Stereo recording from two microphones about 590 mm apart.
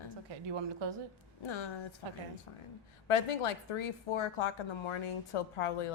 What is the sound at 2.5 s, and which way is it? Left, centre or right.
A woman's voice, left.